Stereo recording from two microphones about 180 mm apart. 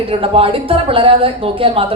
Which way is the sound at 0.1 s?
30° right (ahead or behind).